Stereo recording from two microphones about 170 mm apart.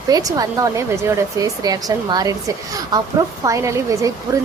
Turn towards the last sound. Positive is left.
turn(degrees=-20)  # may be behind; listen again after turning